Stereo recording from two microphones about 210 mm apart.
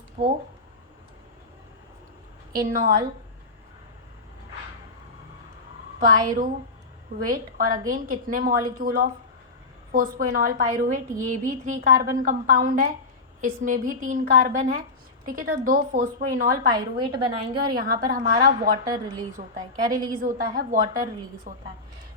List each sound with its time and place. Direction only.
0.2 s a sound: 40° right (ahead or behind)
2.7 s a woman's voice: 45° right (ahead or behind)
6.0 s a woman's voice: 40° right (ahead or behind)
16.7 s a woman's voice: 20° right (ahead or behind)
17.7 s a woman's voice: 45° right (ahead or behind)